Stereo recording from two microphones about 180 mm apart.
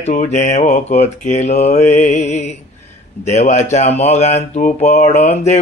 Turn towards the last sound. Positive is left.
turn(degrees=40)  # may be behind; listen again after turning